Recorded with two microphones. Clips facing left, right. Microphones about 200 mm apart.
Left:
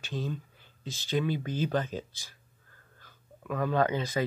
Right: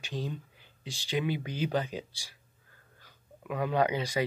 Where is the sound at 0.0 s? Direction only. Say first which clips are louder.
Left 1 dB; 15° right (ahead or behind).